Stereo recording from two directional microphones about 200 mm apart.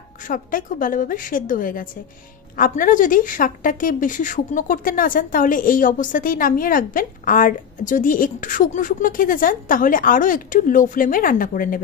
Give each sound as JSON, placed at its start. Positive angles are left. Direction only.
{"t": 0.2, "sound": "a woman's voice", "side_deg": 40}